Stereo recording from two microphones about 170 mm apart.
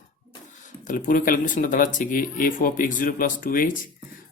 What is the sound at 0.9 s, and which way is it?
Speech, 50° left (ahead or behind).